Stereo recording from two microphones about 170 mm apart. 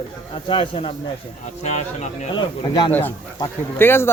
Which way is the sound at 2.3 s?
30° left (ahead or behind).